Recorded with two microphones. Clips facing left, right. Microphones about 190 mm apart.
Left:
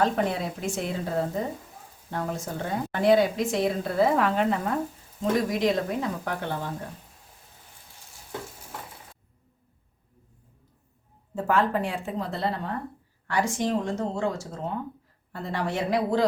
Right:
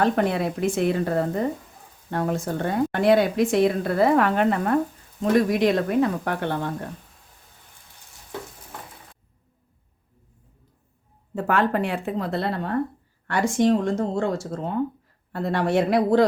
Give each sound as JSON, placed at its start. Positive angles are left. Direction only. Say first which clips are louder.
{"t": 0.0, "sound": "a woman's voice", "louder": "right 4 dB", "side_deg": -65}
{"t": 11.3, "sound": "a woman's voice", "louder": "right 2 dB", "side_deg": -65}